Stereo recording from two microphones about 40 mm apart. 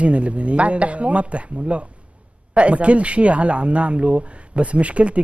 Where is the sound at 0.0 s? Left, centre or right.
Right.